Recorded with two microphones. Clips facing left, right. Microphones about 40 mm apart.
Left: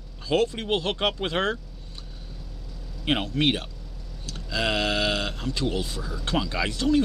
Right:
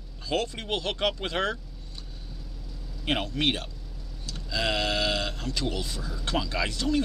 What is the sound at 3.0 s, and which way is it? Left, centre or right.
Speech, left.